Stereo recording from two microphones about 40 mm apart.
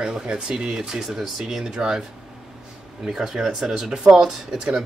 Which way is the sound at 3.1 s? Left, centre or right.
Centre.